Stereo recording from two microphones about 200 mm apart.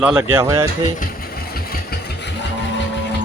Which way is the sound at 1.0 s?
50° left (ahead or behind).